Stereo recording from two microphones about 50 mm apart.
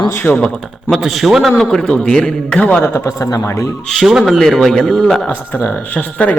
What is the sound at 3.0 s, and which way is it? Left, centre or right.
Speech, left.